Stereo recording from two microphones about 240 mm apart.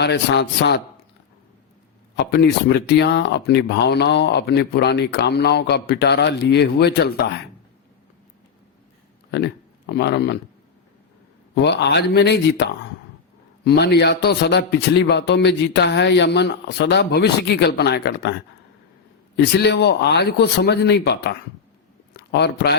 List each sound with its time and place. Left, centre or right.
0.0 s speech: left
2.1 s speech: left
9.3 s speech: left
11.5 s speech: left
13.7 s speech: left
22.1 s a sound: left